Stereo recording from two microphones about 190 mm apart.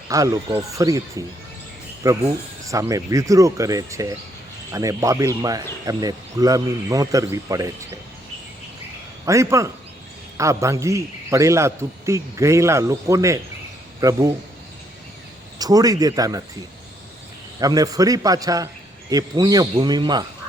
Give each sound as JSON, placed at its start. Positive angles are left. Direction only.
{"t": 0.1, "sound": "a man's voice", "side_deg": -20}
{"t": 9.2, "sound": "a man's voice", "side_deg": -15}
{"t": 15.5, "sound": "a man's voice", "side_deg": -20}
{"t": 17.6, "sound": "a man's voice", "side_deg": -20}